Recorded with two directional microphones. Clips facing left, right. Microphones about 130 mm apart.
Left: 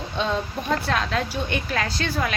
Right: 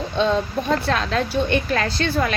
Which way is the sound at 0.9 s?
10° left (ahead or behind).